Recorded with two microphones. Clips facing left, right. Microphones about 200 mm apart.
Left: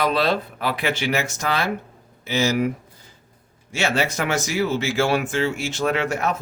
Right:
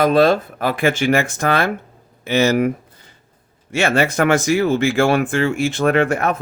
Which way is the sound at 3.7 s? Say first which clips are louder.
Right 6 dB; 55° right (ahead or behind).